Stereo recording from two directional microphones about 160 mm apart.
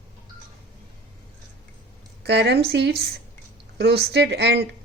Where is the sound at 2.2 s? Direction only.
90° right.